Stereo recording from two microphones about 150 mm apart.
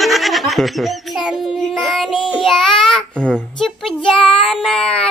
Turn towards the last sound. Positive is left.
turn(degrees=5)  # may be behind; listen again after turning